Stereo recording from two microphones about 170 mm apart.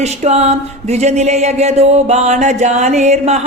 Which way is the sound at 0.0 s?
40° right (ahead or behind).